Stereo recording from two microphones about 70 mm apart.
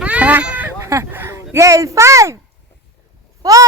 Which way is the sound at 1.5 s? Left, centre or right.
Right.